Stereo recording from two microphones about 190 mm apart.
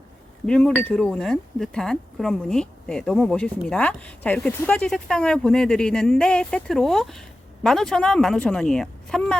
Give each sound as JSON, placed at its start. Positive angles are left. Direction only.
{"t": 0.4, "sound": "speech", "side_deg": 5}